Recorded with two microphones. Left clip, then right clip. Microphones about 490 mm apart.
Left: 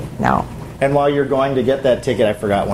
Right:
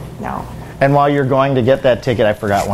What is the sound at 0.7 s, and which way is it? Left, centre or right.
Speech, right.